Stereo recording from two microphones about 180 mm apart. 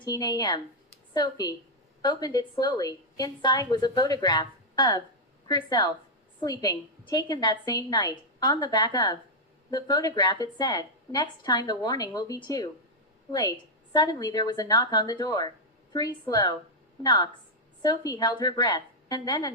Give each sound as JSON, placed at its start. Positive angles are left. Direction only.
{"t": 0.0, "sound": "a woman's voice", "side_deg": 25}
{"t": 13.9, "sound": "a woman's voice", "side_deg": 25}